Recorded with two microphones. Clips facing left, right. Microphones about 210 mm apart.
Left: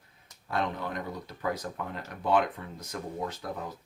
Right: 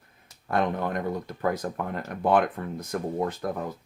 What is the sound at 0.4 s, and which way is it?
Speech, 55° right (ahead or behind).